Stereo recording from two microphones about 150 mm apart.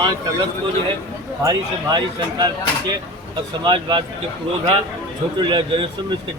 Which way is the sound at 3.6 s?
30° right (ahead or behind).